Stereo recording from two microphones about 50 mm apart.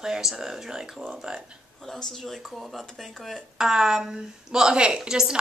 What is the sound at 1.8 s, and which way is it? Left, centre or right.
Speech, centre.